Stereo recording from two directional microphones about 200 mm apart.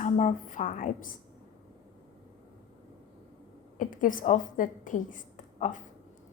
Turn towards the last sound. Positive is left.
turn(degrees=40)  # may be behind; listen again after turning